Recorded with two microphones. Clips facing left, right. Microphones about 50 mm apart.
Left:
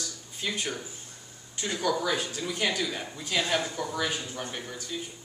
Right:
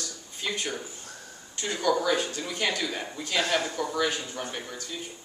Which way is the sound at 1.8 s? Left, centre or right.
Centre.